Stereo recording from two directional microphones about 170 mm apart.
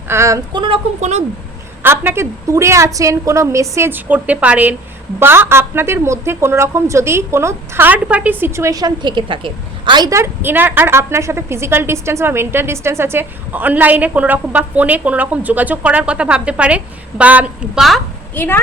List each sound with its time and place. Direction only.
0.1 s a woman's voice: 15° right (ahead or behind)
0.6 s speech: 35° right (ahead or behind)
1.8 s a woman's voice: 15° right (ahead or behind)
18.3 s a woman's voice: 10° left (ahead or behind)